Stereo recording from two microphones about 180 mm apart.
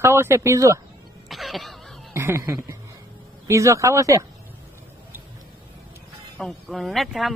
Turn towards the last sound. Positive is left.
turn(degrees=0)  # may be behind; listen again after turning